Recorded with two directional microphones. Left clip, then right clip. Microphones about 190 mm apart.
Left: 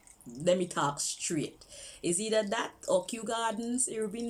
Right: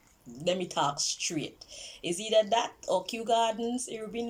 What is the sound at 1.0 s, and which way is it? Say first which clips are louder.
Speech: right 2 dB; 80° left.